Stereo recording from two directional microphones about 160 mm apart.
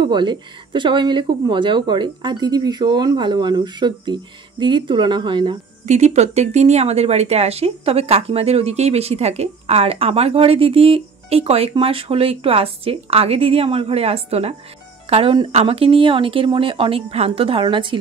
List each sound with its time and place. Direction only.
0.0 s speech: 30° right (ahead or behind)
5.9 s speech: 45° right (ahead or behind)